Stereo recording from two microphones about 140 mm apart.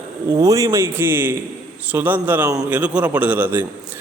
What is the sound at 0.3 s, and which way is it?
A man's voice, 25° right (ahead or behind).